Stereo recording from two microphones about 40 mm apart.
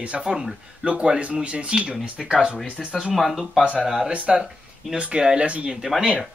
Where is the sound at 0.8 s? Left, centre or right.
Right.